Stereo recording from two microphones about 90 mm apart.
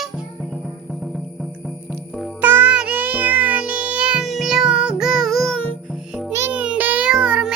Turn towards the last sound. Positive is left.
turn(degrees=-10)  # may be behind; listen again after turning